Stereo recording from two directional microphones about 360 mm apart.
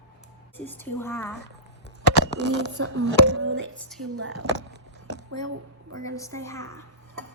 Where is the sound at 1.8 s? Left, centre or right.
Left.